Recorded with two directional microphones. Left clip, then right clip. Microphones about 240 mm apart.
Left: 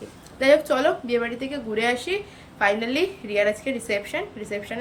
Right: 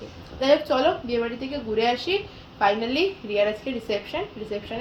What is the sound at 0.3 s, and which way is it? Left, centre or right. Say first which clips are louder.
A woman's voice: left 2 dB; centre.